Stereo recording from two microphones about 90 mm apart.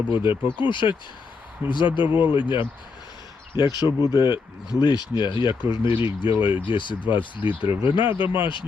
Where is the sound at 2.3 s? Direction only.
60° left (ahead or behind).